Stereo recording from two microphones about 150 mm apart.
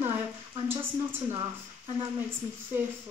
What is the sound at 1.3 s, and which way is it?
Speech, 30° right (ahead or behind).